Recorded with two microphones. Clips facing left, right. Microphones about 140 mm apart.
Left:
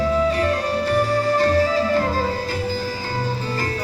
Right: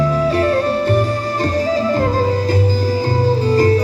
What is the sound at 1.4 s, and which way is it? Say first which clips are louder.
Music: right 3 dB; 45° right (ahead or behind).